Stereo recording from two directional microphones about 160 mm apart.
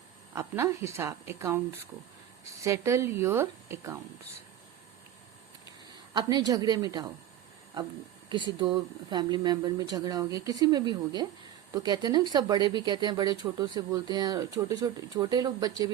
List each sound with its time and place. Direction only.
0.3 s a woman's voice: 15° right (ahead or behind)
6.1 s speech: 25° right (ahead or behind)
8.3 s speech: 30° right (ahead or behind)